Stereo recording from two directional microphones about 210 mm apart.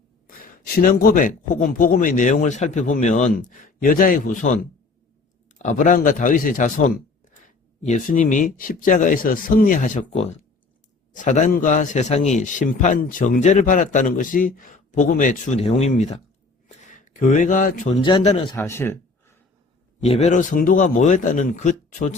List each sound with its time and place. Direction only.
0.3 s a man's voice: 40° left (ahead or behind)
18.5 s speech: 10° left (ahead or behind)
20.0 s a man's voice: 30° left (ahead or behind)